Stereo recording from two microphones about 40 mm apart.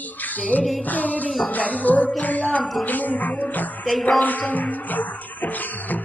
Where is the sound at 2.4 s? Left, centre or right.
Left.